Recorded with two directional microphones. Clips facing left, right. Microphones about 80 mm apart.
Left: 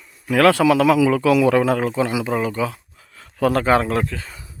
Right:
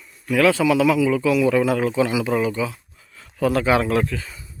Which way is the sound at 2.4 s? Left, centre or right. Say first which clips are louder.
Even; left.